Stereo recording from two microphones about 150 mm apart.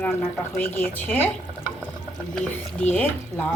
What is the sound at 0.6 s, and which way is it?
Speech, 15° left (ahead or behind).